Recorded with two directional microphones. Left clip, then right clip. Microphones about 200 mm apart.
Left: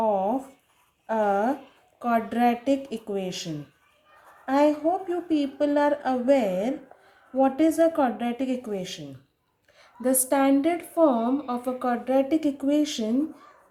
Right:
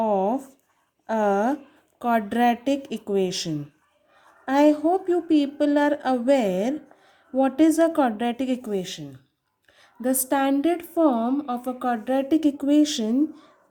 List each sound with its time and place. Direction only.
0.0 s a sound: 45° right (ahead or behind)
2.0 s a woman's voice: 40° right (ahead or behind)
10.0 s a woman's voice: 30° right (ahead or behind)